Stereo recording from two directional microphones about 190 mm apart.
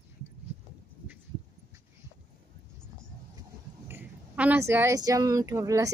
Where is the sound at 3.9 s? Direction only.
10° right (ahead or behind).